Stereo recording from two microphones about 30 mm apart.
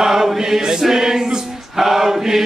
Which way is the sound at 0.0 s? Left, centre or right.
Centre.